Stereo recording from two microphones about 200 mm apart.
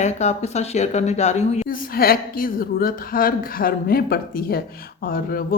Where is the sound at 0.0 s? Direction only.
35° left (ahead or behind).